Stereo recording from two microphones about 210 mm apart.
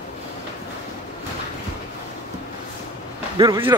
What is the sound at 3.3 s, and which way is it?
Speech, 15° right (ahead or behind).